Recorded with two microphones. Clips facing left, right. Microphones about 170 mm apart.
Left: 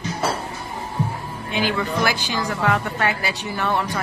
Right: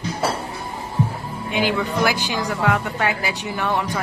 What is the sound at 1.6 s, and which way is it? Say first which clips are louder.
Speech: right 1 dB; 15° right (ahead or behind).